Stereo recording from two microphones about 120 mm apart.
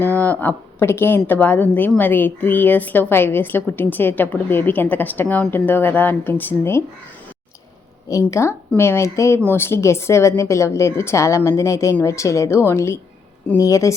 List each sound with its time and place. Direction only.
0.0 s a woman's voice: 15° left (ahead or behind)
8.3 s a woman's voice: 25° left (ahead or behind)